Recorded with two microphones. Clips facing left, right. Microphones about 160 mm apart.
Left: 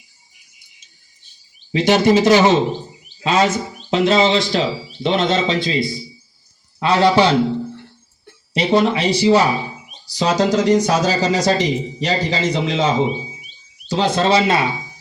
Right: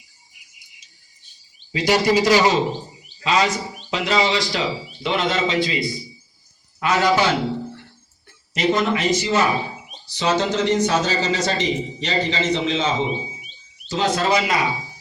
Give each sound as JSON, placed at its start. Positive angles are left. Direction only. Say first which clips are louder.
{"t": 1.7, "sound": "speech", "louder": "left 4 dB", "side_deg": 25}
{"t": 8.5, "sound": "speech", "louder": "left 4 dB", "side_deg": 30}